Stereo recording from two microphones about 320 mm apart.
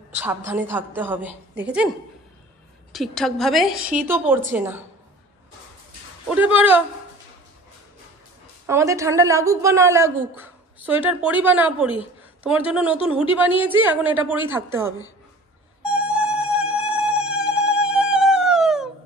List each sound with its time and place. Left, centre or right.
0.5 s a woman's voice: centre
2.9 s a woman's voice: centre
3.8 s a woman's voice: right
4.1 s a woman's voice: centre
6.2 s a woman's voice: centre
8.6 s a woman's voice: centre
15.8 s music: centre